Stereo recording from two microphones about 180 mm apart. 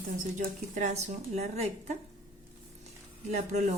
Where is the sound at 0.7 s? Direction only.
40° right (ahead or behind).